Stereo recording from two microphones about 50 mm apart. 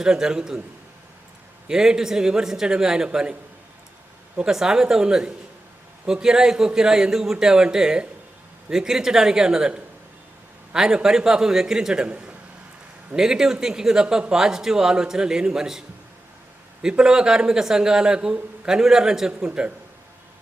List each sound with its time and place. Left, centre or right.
0.0 s speech: centre
1.6 s speech: centre
4.4 s a man's voice: centre
17.0 s speech: centre